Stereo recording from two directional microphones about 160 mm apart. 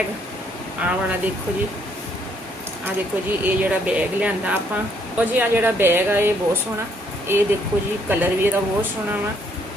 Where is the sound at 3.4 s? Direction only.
10° right (ahead or behind).